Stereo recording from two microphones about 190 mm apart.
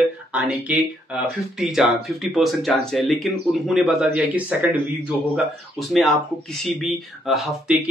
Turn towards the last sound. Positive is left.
turn(degrees=0)  # may be behind; listen again after turning